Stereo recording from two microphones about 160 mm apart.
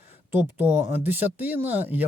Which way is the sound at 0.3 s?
15° right (ahead or behind).